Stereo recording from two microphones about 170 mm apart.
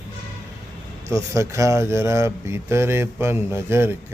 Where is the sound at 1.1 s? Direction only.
15° right (ahead or behind).